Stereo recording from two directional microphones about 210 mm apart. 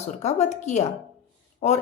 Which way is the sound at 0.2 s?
30° left (ahead or behind).